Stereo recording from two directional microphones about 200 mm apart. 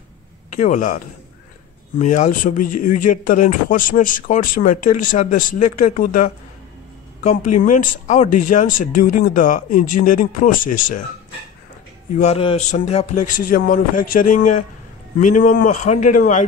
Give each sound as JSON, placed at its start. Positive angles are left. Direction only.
{"t": 0.5, "sound": "speech", "side_deg": 40}
{"t": 12.2, "sound": "speech", "side_deg": 30}